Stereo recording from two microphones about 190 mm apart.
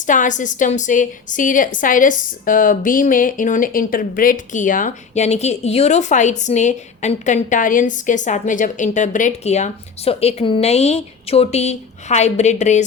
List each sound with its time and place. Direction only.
0.0 s a woman's voice: 40° left (ahead or behind)